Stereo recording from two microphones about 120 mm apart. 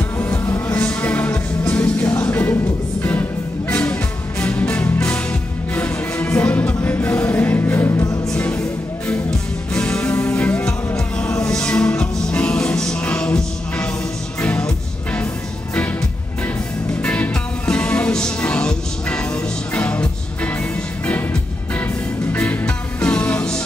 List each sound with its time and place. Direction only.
0.7 s music: 15° left (ahead or behind)
8.3 s music: 15° left (ahead or behind)
11.2 s music: 30° left (ahead or behind)
11.5 s music: 10° left (ahead or behind)
17.0 s music: 10° left (ahead or behind)